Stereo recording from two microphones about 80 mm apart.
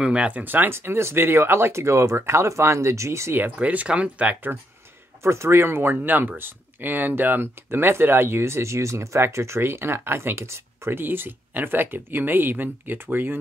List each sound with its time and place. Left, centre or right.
0.0 s speech: centre
5.2 s speech: right